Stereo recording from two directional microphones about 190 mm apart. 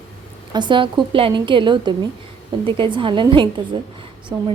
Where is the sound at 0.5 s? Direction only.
25° right (ahead or behind).